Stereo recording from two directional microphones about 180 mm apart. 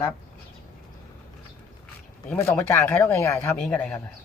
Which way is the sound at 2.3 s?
10° left (ahead or behind).